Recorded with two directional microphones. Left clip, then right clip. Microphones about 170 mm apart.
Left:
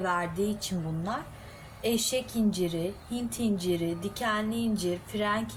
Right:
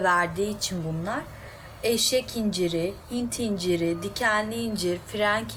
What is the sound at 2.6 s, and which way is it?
A woman's voice, 20° right (ahead or behind).